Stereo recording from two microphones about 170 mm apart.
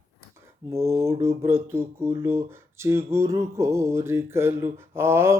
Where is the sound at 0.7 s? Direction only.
15° right (ahead or behind).